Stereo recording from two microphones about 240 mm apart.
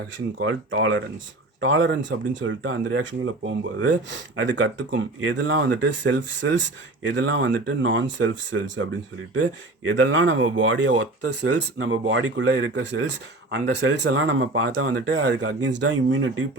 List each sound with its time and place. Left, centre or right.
0.3 s speech: right
9.9 s speech: right